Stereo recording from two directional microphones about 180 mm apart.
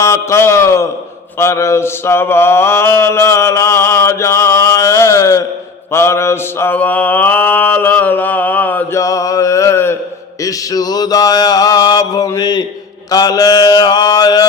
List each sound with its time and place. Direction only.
0.0 s a man's voice: 15° left (ahead or behind)
1.4 s mantra: 15° left (ahead or behind)